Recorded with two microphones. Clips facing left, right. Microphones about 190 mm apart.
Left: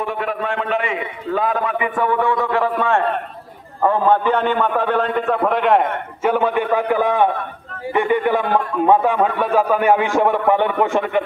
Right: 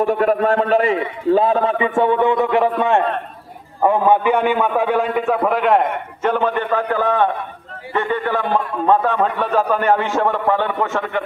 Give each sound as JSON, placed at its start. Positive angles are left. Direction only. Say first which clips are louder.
{"t": 0.0, "sound": "a man's voice", "louder": "right 7 dB", "side_deg": -40}